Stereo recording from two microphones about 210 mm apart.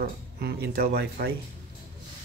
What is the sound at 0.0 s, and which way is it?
Speech, 50° right (ahead or behind).